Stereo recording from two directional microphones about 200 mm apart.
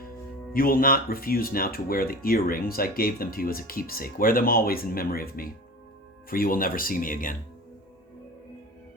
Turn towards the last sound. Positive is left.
turn(degrees=45)  # may be behind; listen again after turning